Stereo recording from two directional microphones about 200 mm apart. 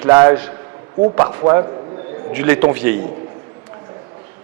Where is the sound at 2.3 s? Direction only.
10° right (ahead or behind).